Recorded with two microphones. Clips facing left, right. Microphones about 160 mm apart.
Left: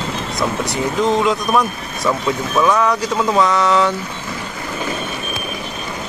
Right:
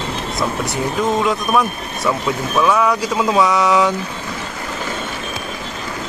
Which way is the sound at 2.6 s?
5° right (ahead or behind).